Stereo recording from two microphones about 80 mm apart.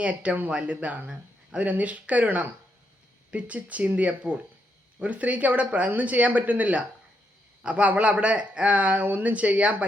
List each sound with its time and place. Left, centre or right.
0.0 s speech: centre